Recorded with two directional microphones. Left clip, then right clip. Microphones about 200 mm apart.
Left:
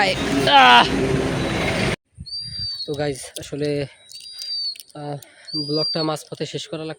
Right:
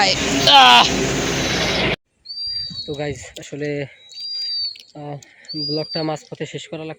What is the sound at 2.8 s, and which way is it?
Speech, 25° left (ahead or behind).